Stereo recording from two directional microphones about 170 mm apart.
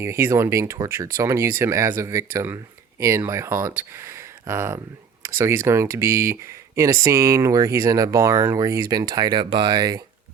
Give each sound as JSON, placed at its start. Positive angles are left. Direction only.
{"t": 0.0, "sound": "speech", "side_deg": -15}